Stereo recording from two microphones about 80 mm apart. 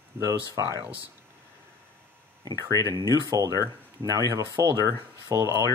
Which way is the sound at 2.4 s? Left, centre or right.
Right.